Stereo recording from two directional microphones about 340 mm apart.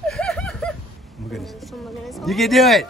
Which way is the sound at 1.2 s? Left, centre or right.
Centre.